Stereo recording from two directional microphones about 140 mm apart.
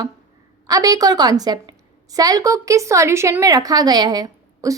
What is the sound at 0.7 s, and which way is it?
A woman's voice, 25° right (ahead or behind).